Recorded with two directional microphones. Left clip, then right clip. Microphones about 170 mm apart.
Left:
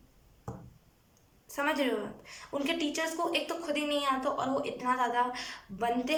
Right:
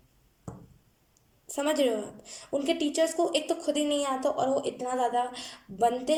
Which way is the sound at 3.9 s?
40° right (ahead or behind).